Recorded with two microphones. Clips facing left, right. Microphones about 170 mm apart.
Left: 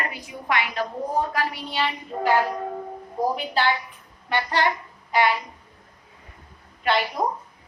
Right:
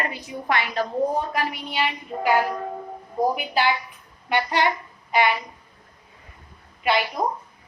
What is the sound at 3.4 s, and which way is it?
A woman's voice, 10° right (ahead or behind).